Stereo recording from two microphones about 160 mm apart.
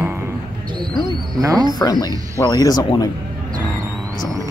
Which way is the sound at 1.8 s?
25° left (ahead or behind).